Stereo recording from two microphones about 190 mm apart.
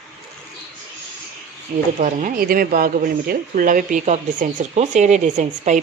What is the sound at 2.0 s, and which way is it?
Speech, 45° right (ahead or behind).